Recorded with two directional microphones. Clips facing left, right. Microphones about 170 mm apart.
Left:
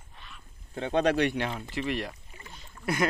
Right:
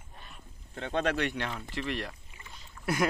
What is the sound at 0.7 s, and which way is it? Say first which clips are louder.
Speech: left 5 dB; 15° left (ahead or behind).